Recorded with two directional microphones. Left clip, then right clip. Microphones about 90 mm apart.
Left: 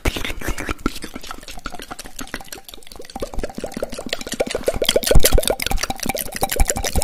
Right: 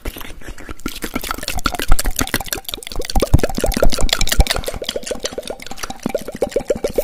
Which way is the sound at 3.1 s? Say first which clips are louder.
Right 9 dB; 35° right (ahead or behind).